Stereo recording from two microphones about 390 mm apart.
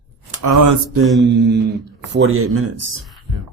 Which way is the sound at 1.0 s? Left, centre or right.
Centre.